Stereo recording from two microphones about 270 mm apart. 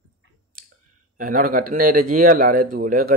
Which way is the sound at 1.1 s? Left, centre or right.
Right.